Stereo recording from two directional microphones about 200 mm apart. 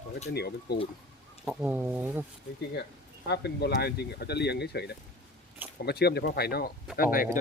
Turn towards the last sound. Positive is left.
turn(degrees=45)  # may be behind; listen again after turning